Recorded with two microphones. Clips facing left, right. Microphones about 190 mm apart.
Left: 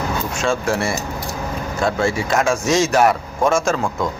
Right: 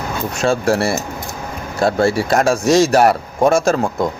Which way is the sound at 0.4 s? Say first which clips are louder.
Right 5 dB; 35° right (ahead or behind).